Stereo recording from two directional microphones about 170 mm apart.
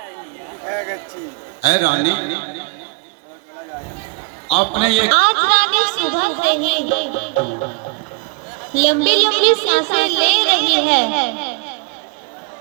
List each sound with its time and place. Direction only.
1.7 s a man's voice: 25° left (ahead or behind)
4.5 s a woman's voice: 35° left (ahead or behind)
8.7 s a woman's voice: 45° left (ahead or behind)